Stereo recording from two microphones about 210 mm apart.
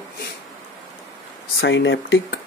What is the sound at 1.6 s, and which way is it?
Speech, 60° left (ahead or behind).